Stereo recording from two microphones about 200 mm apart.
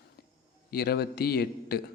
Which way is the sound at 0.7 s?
50° left (ahead or behind).